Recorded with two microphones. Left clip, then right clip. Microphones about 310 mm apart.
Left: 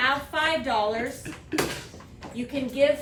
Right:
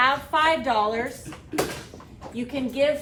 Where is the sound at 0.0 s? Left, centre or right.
Centre.